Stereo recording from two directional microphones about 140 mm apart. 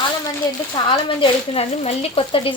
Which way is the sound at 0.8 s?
40° left (ahead or behind).